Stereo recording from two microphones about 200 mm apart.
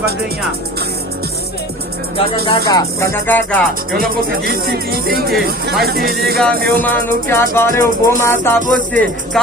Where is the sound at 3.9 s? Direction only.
45° right (ahead or behind).